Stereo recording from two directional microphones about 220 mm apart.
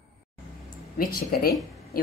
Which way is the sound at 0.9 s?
40° left (ahead or behind).